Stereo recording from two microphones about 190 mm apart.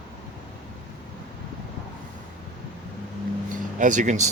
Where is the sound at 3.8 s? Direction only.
40° right (ahead or behind).